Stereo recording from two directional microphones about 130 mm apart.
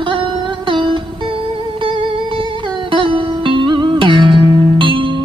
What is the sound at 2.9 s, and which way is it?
Music, 40° right (ahead or behind).